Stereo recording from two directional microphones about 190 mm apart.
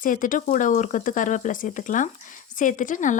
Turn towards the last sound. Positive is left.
turn(degrees=40)  # may be behind; listen again after turning